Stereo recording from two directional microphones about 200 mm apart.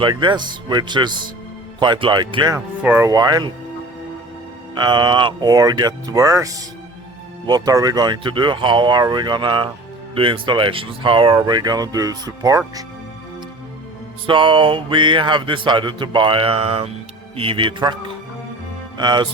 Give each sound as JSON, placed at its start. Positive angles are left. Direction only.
{"t": 0.0, "sound": "speech", "side_deg": -25}
{"t": 2.8, "sound": "speech", "side_deg": -5}
{"t": 3.1, "sound": "speech", "side_deg": -20}
{"t": 4.7, "sound": "speech", "side_deg": -20}
{"t": 14.3, "sound": "speech", "side_deg": -25}
{"t": 18.9, "sound": "speech", "side_deg": -20}